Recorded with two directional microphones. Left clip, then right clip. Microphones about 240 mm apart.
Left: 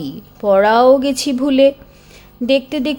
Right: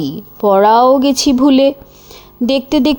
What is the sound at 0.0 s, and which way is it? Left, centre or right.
A woman's voice, centre.